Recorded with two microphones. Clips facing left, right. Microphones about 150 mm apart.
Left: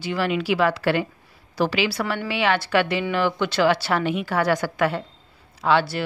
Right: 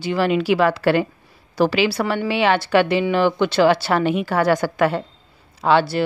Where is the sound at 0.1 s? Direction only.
35° right (ahead or behind).